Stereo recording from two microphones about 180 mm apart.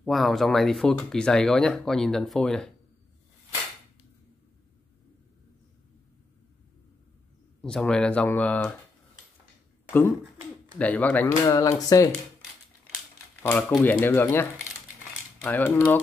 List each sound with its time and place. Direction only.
0.0 s speech: centre (ahead or behind)
7.6 s speech: 5° left (ahead or behind)
9.8 s speech: 10° left (ahead or behind)
11.4 s speech: 20° left (ahead or behind)
13.4 s speech: 10° left (ahead or behind)